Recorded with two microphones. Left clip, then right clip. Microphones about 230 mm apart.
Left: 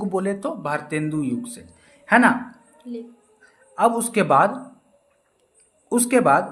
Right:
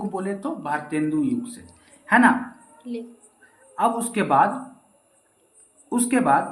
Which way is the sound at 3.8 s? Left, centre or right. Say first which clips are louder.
Left 3 dB; left.